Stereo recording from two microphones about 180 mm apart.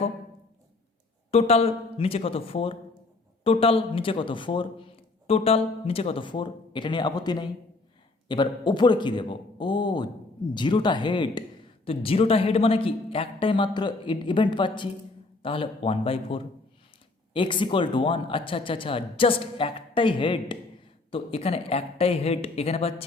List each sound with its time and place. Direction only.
1.3 s a man's voice: 35° left (ahead or behind)